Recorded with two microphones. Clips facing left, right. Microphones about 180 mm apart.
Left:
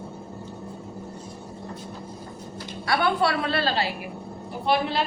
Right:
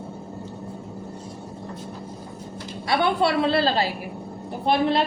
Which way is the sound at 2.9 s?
20° right (ahead or behind).